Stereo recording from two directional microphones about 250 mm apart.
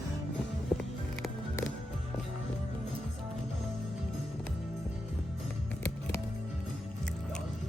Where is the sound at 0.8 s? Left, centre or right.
Centre.